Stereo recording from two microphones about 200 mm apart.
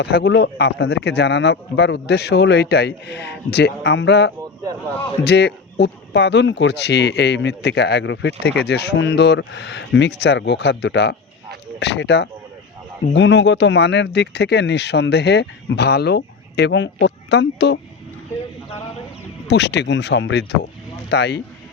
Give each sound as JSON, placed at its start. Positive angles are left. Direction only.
{"t": 0.0, "sound": "speech", "side_deg": 50}
{"t": 19.5, "sound": "speech", "side_deg": 60}